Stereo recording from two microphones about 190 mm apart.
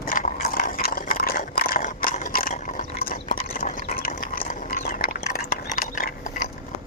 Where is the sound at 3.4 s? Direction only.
40° left (ahead or behind).